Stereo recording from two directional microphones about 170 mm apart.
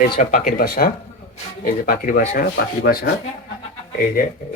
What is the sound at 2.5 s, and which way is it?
Speech, 70° left (ahead or behind).